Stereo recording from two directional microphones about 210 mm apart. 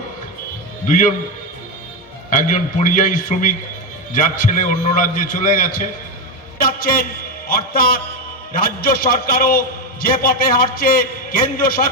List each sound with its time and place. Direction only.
0.9 s a man's voice: 35° left (ahead or behind)
2.3 s a man's voice: 40° left (ahead or behind)